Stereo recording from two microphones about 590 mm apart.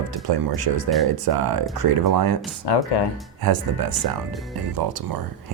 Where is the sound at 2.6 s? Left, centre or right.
Left.